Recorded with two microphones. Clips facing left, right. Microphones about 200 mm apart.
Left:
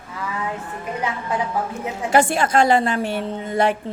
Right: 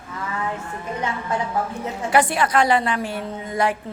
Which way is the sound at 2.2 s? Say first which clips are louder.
Left 2 dB; 25° left (ahead or behind).